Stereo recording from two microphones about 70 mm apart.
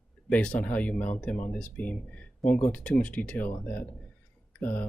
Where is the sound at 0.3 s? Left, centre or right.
Centre.